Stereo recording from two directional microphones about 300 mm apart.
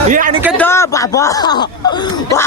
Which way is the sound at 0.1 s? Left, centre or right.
Right.